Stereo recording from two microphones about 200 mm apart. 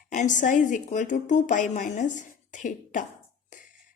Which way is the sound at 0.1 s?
40° left (ahead or behind).